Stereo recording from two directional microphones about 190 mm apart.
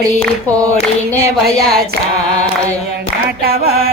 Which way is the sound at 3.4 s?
55° right (ahead or behind).